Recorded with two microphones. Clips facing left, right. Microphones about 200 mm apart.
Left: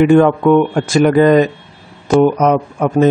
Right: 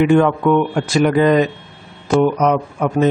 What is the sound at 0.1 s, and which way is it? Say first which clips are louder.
Speech: left 4 dB; 45° left (ahead or behind).